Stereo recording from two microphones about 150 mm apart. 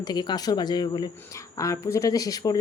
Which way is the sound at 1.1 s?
15° left (ahead or behind).